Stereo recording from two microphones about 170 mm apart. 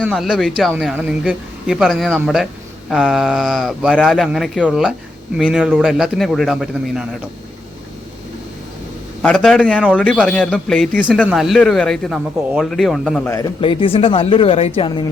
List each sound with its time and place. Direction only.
0.1 s a man's voice: centre (ahead or behind)
9.2 s a man's voice: 5° left (ahead or behind)
13.3 s speech: 25° left (ahead or behind)